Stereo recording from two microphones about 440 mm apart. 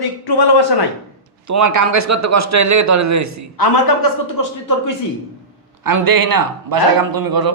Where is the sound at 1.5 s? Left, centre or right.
Right.